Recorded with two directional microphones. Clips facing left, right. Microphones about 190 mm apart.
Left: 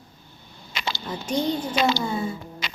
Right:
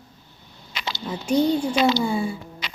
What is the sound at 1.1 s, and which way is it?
Speech, 5° right (ahead or behind).